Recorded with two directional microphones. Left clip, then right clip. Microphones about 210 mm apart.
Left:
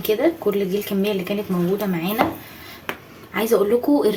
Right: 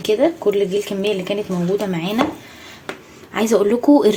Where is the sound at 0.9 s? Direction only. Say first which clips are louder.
Right 2 dB; 40° right (ahead or behind).